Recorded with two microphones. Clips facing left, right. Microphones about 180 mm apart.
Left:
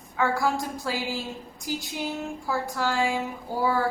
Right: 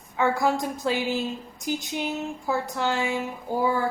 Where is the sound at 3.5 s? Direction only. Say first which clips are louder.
Right 4 dB; 20° right (ahead or behind).